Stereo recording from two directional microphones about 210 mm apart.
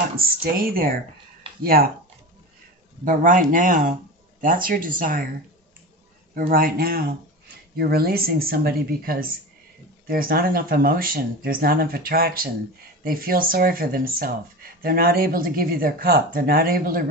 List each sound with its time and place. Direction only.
0.2 s speech: 45° right (ahead or behind)
3.1 s speech: 40° right (ahead or behind)
6.3 s speech: 45° right (ahead or behind)